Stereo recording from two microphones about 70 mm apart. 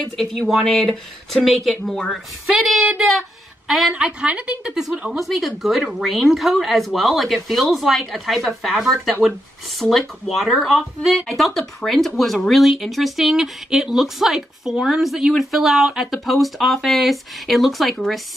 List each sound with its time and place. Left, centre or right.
0.0 s speech: centre
3.9 s a woman's voice: centre